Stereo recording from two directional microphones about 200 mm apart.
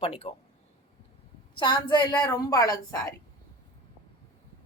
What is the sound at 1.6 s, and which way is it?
A woman's voice, 25° left (ahead or behind).